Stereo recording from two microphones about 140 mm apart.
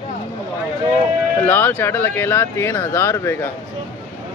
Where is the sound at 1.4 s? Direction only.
15° left (ahead or behind).